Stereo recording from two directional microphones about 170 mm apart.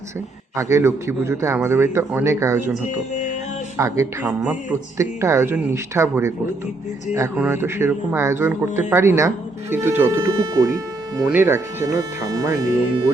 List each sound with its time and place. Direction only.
0.5 s speech: 15° right (ahead or behind)
3.8 s speech: 20° right (ahead or behind)